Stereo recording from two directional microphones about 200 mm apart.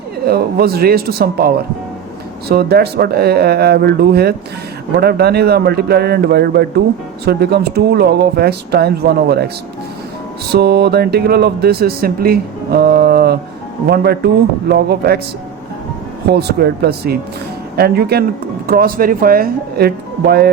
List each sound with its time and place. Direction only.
0.3 s speech: 50° right (ahead or behind)
10.5 s speech: 55° right (ahead or behind)
16.3 s speech: 55° right (ahead or behind)